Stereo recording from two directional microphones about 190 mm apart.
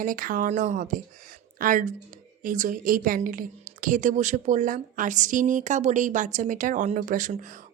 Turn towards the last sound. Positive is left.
turn(degrees=-40)  # may be behind; listen again after turning